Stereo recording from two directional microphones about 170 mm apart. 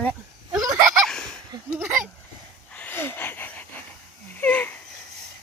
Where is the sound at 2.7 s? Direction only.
10° left (ahead or behind).